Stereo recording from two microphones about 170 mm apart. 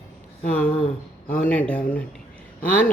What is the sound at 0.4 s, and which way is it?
Speech, 10° left (ahead or behind).